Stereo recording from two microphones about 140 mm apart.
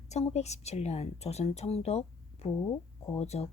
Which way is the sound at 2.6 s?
25° left (ahead or behind).